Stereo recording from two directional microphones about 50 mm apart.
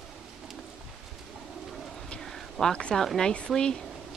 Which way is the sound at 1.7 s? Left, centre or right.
Centre.